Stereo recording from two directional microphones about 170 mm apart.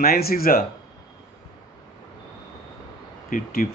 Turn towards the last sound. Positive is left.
turn(degrees=55)  # may be behind; listen again after turning